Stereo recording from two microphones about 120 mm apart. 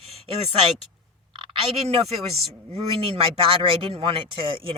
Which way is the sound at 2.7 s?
50° right (ahead or behind).